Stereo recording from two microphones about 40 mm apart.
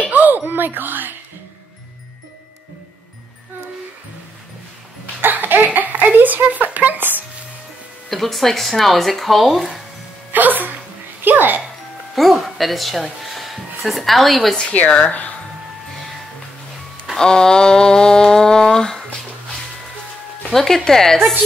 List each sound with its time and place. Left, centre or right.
0.1 s a sound: right
0.5 s speech: right
5.2 s cough: right
5.8 s a sound: right
6.4 s speech: right
8.1 s speech: centre
10.3 s music: right
12.2 s speech: centre
14.7 s speech: left
17.2 s mantra: centre
20.4 s mantra: centre